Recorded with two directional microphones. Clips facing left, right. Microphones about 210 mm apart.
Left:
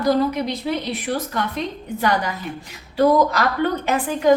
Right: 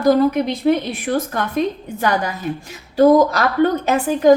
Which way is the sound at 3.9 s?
45° right (ahead or behind).